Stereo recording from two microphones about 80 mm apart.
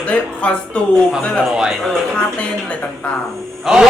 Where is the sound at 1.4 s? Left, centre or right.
Centre.